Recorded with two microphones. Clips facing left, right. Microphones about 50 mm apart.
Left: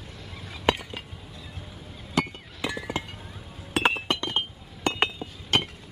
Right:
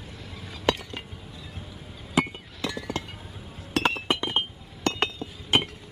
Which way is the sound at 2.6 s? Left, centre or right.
Centre.